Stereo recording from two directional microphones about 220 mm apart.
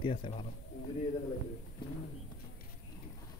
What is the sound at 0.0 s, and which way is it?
Speech, 25° left (ahead or behind).